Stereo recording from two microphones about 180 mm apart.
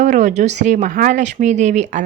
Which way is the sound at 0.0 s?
45° right (ahead or behind).